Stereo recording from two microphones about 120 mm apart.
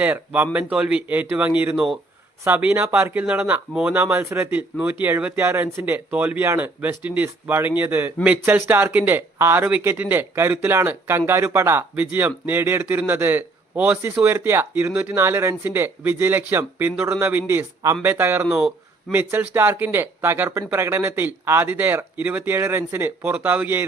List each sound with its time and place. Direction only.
0.0 s speech: 15° right (ahead or behind)
18.5 s a sound: 5° right (ahead or behind)
19.1 s speech: 15° right (ahead or behind)